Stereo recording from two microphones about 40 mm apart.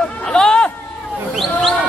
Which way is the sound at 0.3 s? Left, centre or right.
Centre.